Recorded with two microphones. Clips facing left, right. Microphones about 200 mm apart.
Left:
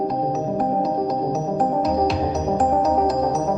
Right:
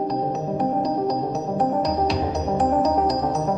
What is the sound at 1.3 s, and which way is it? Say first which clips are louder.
Music: left 1 dB; 5° left (ahead or behind).